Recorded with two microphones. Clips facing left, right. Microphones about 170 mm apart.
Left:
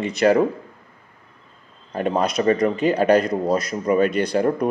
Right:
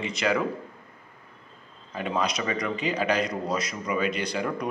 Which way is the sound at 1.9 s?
50° left (ahead or behind).